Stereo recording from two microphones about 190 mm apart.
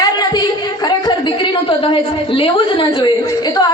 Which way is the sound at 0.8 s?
25° left (ahead or behind).